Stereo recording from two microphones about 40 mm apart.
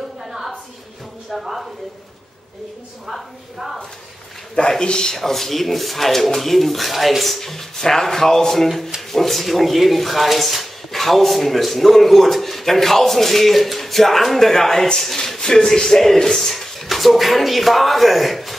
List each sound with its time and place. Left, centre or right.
0.2 s a sound: centre
1.3 s speech: centre
3.1 s speech: centre
4.6 s a man's voice: left
5.1 s speech: centre